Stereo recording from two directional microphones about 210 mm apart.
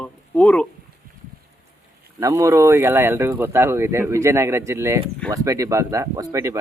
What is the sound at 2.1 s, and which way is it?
Speech, 15° right (ahead or behind).